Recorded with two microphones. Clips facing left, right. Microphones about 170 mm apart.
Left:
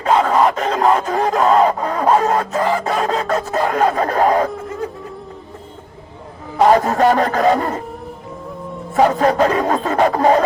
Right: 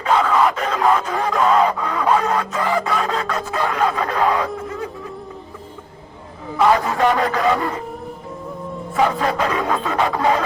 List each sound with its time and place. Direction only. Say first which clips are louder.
0.0 s a sound: left 3 dB; 40° left (ahead or behind)
6.6 s music: left 4 dB; 40° left (ahead or behind)
9.0 s music: left 5 dB; 45° left (ahead or behind)